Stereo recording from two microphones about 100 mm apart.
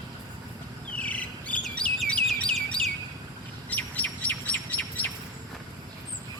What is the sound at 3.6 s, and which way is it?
Bird, 15° left (ahead or behind).